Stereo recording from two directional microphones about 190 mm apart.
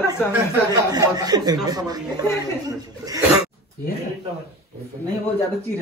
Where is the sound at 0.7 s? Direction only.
20° right (ahead or behind).